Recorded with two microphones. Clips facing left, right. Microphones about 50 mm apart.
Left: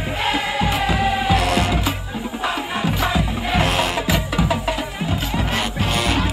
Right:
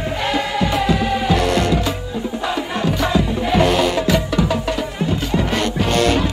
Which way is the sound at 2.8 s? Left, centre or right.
Centre.